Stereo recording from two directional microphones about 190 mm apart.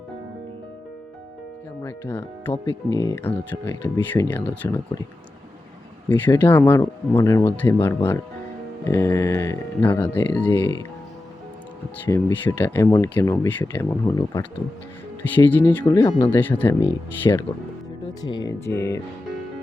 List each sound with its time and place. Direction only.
1.8 s speech: 10° left (ahead or behind)
6.1 s speech: 10° left (ahead or behind)
12.0 s speech: 15° left (ahead or behind)
15.4 s speech: 10° left (ahead or behind)
16.4 s speech: 10° left (ahead or behind)